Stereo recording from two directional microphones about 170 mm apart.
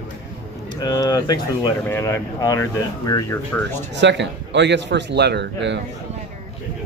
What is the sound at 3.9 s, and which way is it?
A man's voice, 90° right.